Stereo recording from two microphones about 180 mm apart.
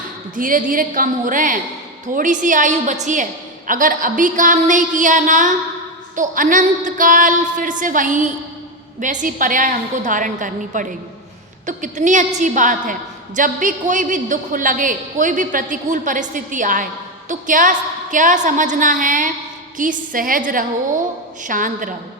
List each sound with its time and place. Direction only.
0.3 s a woman's voice: 50° right (ahead or behind)